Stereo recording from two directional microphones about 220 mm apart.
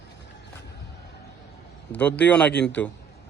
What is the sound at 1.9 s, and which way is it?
Speech, 5° left (ahead or behind).